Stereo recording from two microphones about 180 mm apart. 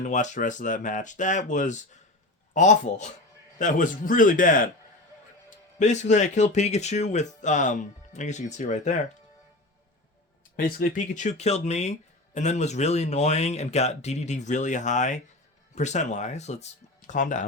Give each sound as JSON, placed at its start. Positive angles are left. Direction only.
{"t": 0.0, "sound": "speech", "side_deg": 45}
{"t": 5.8, "sound": "speech", "side_deg": 40}
{"t": 10.6, "sound": "speech", "side_deg": 50}